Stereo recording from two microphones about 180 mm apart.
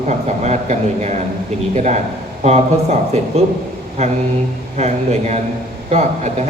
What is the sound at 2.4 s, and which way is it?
Speech, 40° right (ahead or behind).